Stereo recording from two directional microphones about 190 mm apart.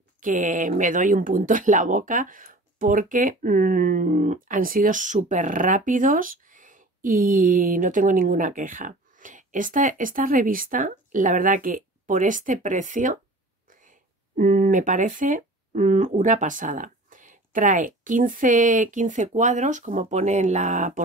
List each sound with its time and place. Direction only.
0.2 s speech: 45° right (ahead or behind)